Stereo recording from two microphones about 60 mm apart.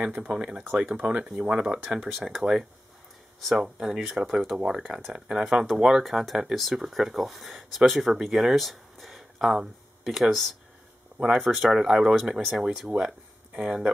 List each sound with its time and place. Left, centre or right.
0.3 s speech: centre
1.2 s speech: centre
1.5 s speech: centre
2.0 s speech: centre
3.4 s speech: centre
11.1 s speech: centre
11.4 s speech: centre
12.2 s speech: centre